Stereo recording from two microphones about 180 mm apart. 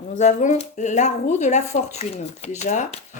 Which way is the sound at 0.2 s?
40° left (ahead or behind).